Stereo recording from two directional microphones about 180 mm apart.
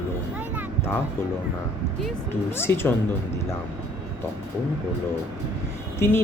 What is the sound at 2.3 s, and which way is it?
Speech, 15° left (ahead or behind).